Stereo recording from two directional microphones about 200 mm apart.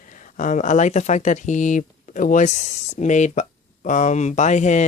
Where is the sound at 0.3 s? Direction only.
40° left (ahead or behind).